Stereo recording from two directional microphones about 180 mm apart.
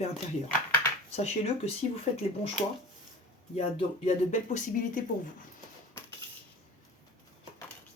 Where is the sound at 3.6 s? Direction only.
35° left (ahead or behind).